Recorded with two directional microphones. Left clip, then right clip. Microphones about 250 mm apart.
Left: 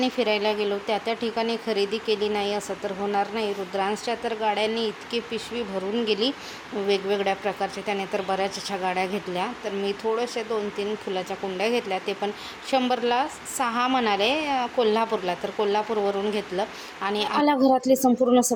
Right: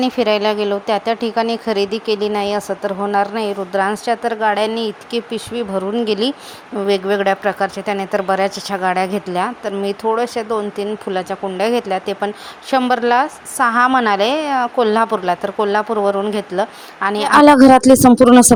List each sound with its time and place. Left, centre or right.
0.0 s speech: right